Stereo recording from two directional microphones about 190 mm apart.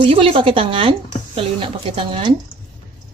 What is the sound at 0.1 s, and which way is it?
Speech, 30° right (ahead or behind).